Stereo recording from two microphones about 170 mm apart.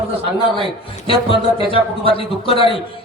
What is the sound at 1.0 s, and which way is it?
A man's voice, 30° left (ahead or behind).